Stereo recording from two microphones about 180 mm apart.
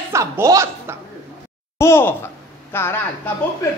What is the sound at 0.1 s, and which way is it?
Speech, 15° right (ahead or behind).